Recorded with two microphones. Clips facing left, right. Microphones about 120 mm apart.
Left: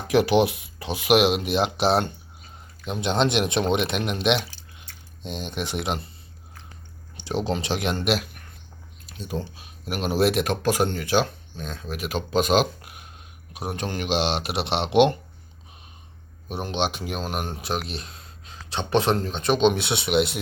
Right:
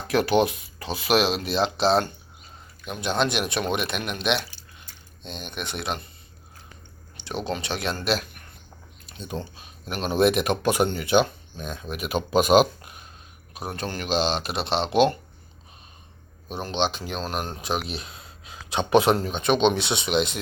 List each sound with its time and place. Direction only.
0.1 s speech: 15° left (ahead or behind)
7.3 s speech: 25° left (ahead or behind)
9.0 s speech: centre (ahead or behind)
12.8 s a sound: 5° left (ahead or behind)
13.5 s speech: 15° left (ahead or behind)
16.5 s speech: 10° left (ahead or behind)
17.7 s speech: centre (ahead or behind)